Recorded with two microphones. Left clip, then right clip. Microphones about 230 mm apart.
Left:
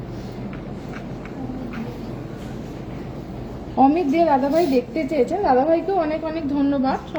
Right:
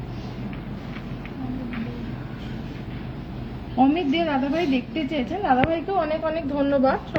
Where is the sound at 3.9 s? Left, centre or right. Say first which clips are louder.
Left 5 dB; centre.